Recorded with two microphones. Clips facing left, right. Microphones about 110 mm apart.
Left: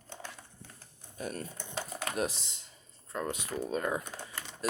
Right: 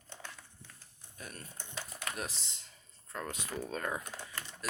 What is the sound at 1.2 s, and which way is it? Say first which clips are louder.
Speech: left 9 dB; 20° left (ahead or behind).